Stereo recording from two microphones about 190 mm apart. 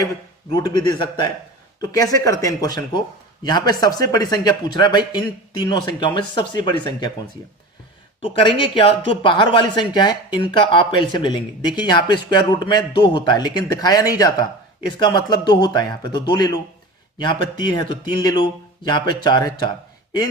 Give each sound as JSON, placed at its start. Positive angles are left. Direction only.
{"t": 0.5, "sound": "a man's voice", "side_deg": 20}
{"t": 8.2, "sound": "a man's voice", "side_deg": 30}